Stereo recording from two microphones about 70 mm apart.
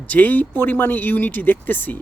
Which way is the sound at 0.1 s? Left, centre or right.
Left.